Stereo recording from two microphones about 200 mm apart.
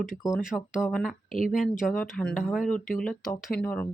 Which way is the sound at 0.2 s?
15° left (ahead or behind).